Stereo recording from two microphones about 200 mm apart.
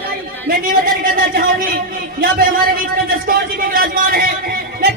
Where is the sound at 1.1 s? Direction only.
45° right (ahead or behind).